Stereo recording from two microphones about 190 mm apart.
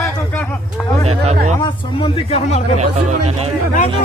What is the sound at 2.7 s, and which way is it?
Speech, 35° right (ahead or behind).